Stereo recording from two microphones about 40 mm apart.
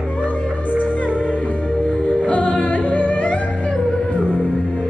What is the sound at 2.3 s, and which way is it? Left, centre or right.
Yodeling, left.